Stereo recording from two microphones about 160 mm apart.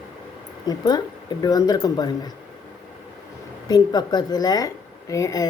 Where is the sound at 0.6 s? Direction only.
25° left (ahead or behind).